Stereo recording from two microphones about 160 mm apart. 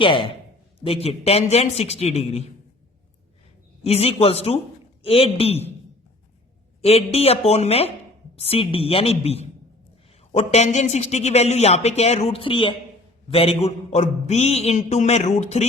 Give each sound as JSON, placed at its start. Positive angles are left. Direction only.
{"t": 0.0, "sound": "a man's voice", "side_deg": 35}
{"t": 3.8, "sound": "a man's voice", "side_deg": 40}
{"t": 6.8, "sound": "a man's voice", "side_deg": 40}